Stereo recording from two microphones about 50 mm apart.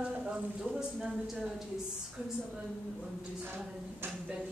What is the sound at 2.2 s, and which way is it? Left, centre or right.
Speech, right.